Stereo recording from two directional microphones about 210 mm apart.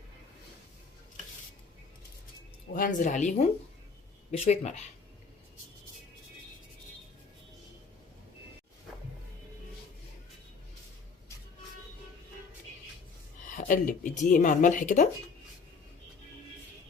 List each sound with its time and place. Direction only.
2.7 s speech: 40° left (ahead or behind)
13.6 s speech: 40° left (ahead or behind)